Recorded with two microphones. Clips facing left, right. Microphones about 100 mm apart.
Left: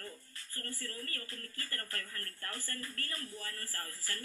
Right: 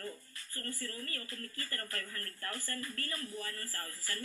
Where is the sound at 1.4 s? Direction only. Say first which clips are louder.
Right 2 dB; 30° right (ahead or behind).